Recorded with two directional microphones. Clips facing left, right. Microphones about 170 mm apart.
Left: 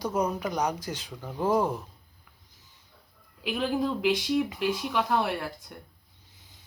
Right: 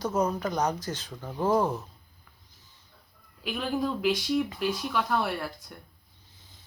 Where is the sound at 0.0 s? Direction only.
15° left (ahead or behind).